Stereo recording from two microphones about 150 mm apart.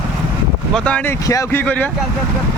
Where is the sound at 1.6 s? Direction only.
10° left (ahead or behind).